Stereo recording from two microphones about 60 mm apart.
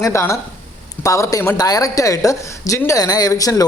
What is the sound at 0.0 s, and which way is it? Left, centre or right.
A man's voice, left.